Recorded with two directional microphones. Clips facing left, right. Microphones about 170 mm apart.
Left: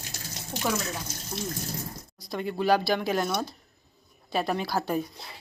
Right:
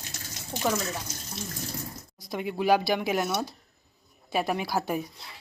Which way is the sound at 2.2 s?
20° right (ahead or behind).